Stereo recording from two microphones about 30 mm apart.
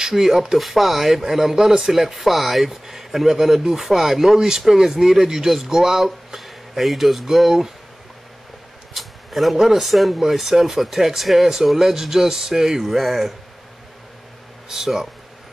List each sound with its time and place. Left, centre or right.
0.2 s speech: centre
0.6 s speech: centre
8.9 s a sound: centre
9.6 s speech: centre
14.7 s speech: centre